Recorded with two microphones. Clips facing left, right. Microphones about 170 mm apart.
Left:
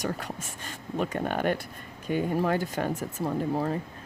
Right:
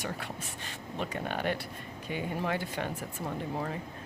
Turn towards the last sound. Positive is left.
turn(degrees=40)  # may be behind; listen again after turning